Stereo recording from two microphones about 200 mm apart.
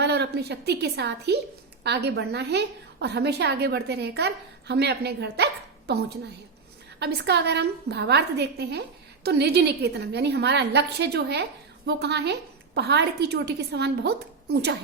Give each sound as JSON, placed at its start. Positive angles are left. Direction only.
{"t": 0.0, "sound": "a woman's voice", "side_deg": -55}